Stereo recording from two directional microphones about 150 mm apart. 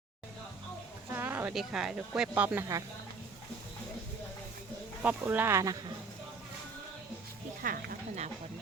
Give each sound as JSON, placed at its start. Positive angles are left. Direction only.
{"t": 1.1, "sound": "speech", "side_deg": -15}
{"t": 5.0, "sound": "speech", "side_deg": -10}
{"t": 7.6, "sound": "speech", "side_deg": -70}